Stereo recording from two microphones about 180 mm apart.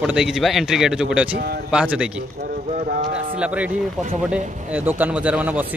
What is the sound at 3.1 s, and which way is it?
Speech, 5° right (ahead or behind).